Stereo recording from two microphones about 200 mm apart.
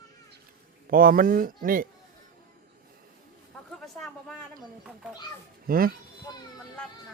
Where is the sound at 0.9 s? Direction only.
45° right (ahead or behind).